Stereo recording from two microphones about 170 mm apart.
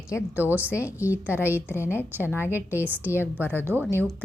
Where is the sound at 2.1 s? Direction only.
10° right (ahead or behind).